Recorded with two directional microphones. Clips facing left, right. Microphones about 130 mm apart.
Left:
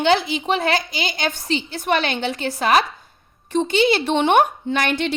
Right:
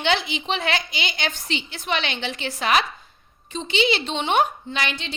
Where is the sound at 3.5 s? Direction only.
50° left (ahead or behind).